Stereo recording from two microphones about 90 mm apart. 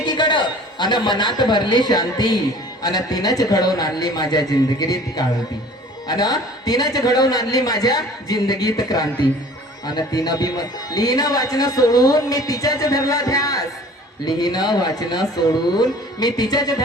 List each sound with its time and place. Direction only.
0.0 s a man's voice: 55° left (ahead or behind)